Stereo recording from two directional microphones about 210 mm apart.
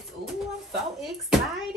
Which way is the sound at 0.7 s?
Centre (ahead or behind).